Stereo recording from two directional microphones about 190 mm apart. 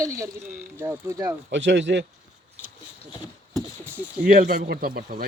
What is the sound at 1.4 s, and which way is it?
Speech, 70° right (ahead or behind).